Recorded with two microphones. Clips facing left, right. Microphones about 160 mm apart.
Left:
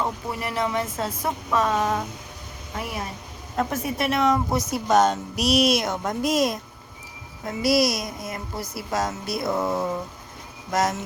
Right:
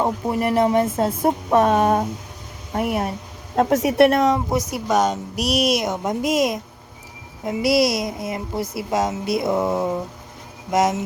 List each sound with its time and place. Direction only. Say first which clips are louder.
0.0 s speech: right 7 dB; 45° right (ahead or behind)
1.5 s a sound: right 6 dB; 55° right (ahead or behind)
3.5 s a woman's voice: right 8 dB; 85° right; by 4.2 s 65° right (ahead or behind)
4.7 s a woman's voice: left 2 dB; 10° right (ahead or behind)